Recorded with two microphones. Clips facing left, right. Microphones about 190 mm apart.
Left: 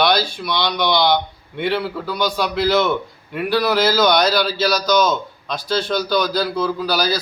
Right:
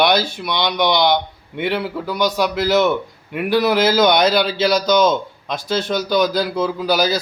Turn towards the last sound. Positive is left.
turn(degrees=-20)  # may be behind; listen again after turning